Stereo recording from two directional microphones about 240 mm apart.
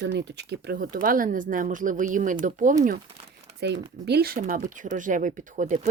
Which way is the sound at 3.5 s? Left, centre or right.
Right.